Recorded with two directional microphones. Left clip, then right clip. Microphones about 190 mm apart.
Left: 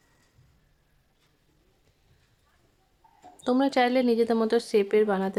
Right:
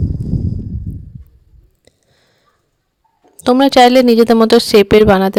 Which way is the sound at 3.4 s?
50° right (ahead or behind).